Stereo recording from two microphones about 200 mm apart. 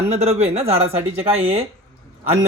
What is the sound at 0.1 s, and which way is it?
Speech, 30° right (ahead or behind).